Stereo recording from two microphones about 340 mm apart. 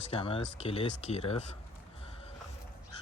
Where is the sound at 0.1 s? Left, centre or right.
Centre.